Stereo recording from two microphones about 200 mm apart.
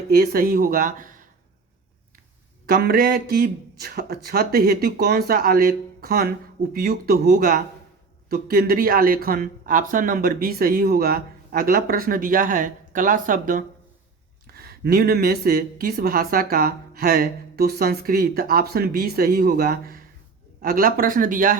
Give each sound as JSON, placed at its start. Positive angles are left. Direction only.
{"t": 0.1, "sound": "speech", "side_deg": -50}
{"t": 2.6, "sound": "speech", "side_deg": -45}